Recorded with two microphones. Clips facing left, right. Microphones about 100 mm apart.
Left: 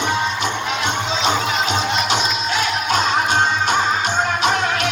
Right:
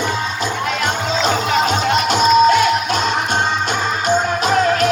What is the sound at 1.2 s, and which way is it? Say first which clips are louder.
Music: right 4 dB; 45° right (ahead or behind).